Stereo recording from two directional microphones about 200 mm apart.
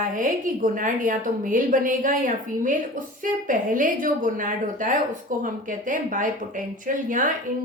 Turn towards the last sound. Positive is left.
turn(degrees=-40)  # may be behind; listen again after turning